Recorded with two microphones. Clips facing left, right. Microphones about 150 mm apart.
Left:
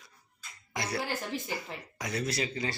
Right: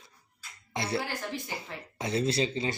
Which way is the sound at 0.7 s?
25° right (ahead or behind).